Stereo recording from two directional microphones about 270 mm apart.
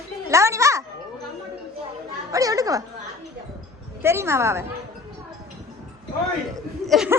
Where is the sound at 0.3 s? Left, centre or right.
Centre.